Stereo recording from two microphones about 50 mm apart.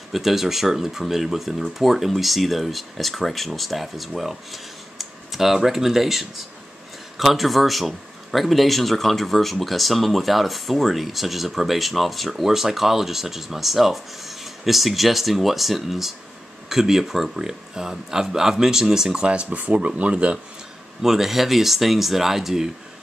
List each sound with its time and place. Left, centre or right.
0.1 s speech: centre; by 20.3 s right
21.0 s speech: centre